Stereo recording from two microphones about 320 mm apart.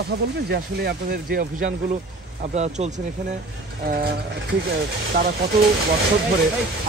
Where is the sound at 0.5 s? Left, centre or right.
Right.